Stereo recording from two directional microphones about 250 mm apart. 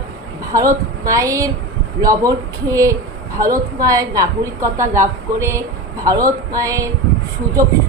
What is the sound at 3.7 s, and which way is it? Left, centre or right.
Speech, centre.